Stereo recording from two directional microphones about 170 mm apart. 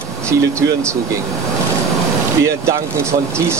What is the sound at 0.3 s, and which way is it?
Speech, 20° right (ahead or behind).